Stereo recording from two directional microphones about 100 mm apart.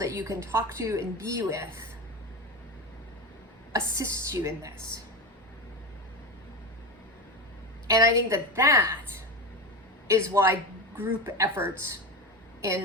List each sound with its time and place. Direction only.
0.0 s a woman's voice: 30° right (ahead or behind)
3.7 s a woman's voice: 30° right (ahead or behind)
7.9 s a woman's voice: 35° right (ahead or behind)
10.1 s a woman's voice: 25° right (ahead or behind)